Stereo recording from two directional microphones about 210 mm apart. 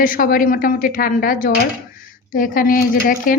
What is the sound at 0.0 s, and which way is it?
A woman's voice, 40° left (ahead or behind).